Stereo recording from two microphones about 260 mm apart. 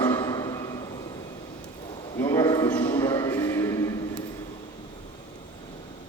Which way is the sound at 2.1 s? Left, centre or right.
Centre.